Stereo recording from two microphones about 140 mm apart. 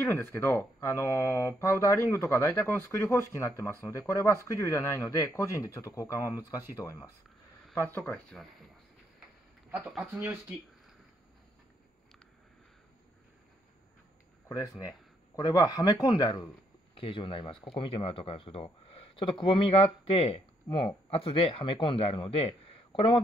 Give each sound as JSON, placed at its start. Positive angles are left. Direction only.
{"t": 0.0, "sound": "speech", "side_deg": 15}
{"t": 7.7, "sound": "speech", "side_deg": 10}
{"t": 9.7, "sound": "speech", "side_deg": -5}
{"t": 14.5, "sound": "speech", "side_deg": 25}
{"t": 16.9, "sound": "speech", "side_deg": 40}